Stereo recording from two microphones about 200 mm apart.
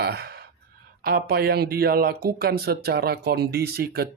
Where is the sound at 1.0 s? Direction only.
50° right (ahead or behind).